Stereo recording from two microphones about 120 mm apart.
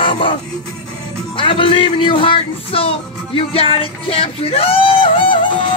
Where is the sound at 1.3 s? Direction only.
45° left (ahead or behind).